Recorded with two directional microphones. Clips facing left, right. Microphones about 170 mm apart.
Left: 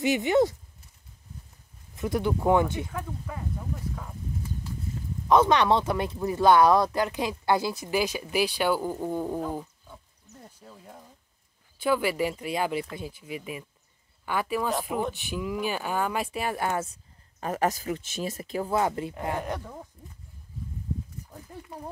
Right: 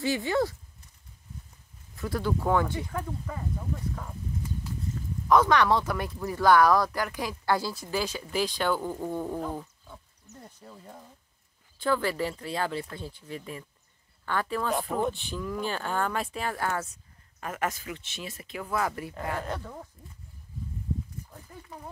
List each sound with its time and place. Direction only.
0.0 s speech: 20° left (ahead or behind)
2.0 s speech: 20° left (ahead or behind)
2.9 s speech: centre (ahead or behind)
5.3 s speech: 20° left (ahead or behind); by 11.1 s centre (ahead or behind)
11.8 s speech: 15° left (ahead or behind)
17.4 s speech: 35° left (ahead or behind); by 19.8 s 15° left (ahead or behind)